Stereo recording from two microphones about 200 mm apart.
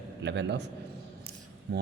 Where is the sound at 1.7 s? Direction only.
55° right (ahead or behind).